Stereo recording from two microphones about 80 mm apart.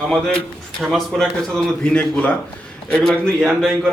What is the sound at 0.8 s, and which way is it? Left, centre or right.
A man's voice, centre.